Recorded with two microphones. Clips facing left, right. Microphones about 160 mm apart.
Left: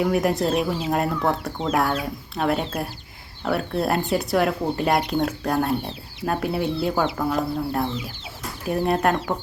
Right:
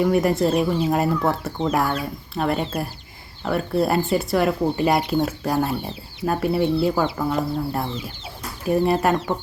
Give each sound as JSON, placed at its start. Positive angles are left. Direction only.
{"t": 0.0, "sound": "speech", "side_deg": 0}